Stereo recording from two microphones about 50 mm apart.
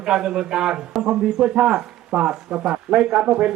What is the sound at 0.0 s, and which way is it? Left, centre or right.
Speech, centre.